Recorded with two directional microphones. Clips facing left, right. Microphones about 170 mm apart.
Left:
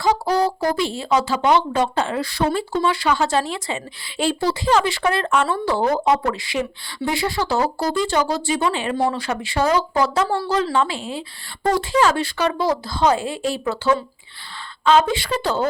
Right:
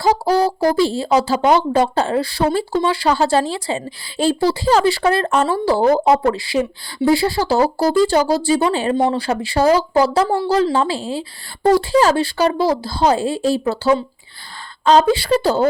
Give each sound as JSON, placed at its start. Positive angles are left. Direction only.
{"t": 0.6, "sound": "a woman's voice", "side_deg": -35}